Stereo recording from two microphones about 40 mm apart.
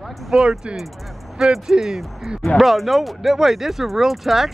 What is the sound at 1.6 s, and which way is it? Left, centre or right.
Speech, centre.